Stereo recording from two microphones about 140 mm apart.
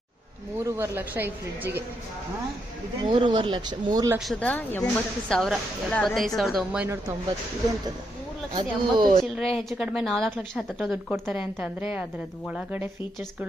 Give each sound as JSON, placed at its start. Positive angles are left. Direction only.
{"t": 0.6, "sound": "speech", "side_deg": -15}
{"t": 3.0, "sound": "speech", "side_deg": -35}
{"t": 4.2, "sound": "a woman's voice", "side_deg": 5}
{"t": 8.5, "sound": "speech", "side_deg": -35}
{"t": 9.5, "sound": "a woman's voice", "side_deg": 0}